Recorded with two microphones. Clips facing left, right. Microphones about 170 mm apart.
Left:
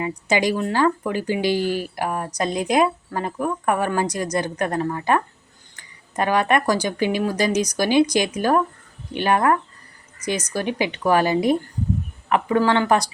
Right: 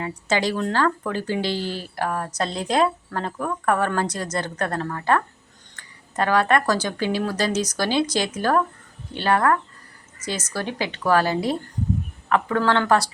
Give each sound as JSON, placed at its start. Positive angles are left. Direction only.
{"t": 0.3, "sound": "speech", "side_deg": 15}